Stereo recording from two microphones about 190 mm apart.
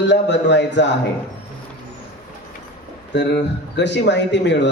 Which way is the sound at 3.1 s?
65° left (ahead or behind).